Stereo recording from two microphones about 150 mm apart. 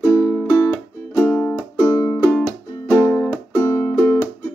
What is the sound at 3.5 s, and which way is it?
Music, 10° left (ahead or behind).